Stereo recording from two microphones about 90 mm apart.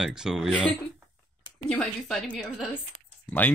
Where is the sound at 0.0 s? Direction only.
5° right (ahead or behind).